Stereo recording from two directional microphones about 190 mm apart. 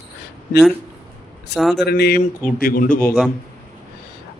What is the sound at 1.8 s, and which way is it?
Speech, 55° left (ahead or behind).